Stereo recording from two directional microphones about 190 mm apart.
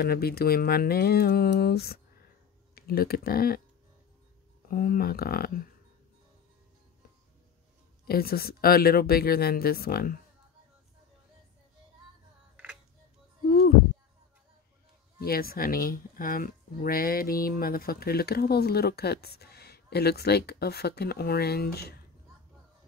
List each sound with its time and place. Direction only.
0.0 s speech: 55° left (ahead or behind)
4.6 s speech: 50° left (ahead or behind)
8.1 s speech: 55° left (ahead or behind)
15.1 s speech: 50° left (ahead or behind)